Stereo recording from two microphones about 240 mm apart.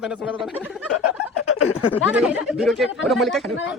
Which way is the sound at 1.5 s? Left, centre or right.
Left.